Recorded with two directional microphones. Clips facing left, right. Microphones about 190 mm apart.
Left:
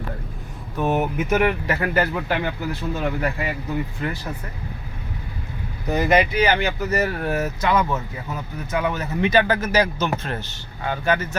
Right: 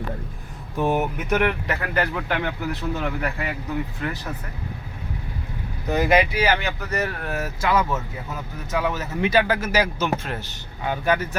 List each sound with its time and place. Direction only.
0.8 s speech: 15° left (ahead or behind)
1.0 s speech: centre (ahead or behind)
5.9 s speech: 5° right (ahead or behind)